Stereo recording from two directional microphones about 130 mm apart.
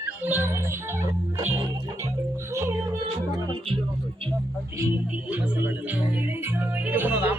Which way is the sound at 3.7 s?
45° right (ahead or behind).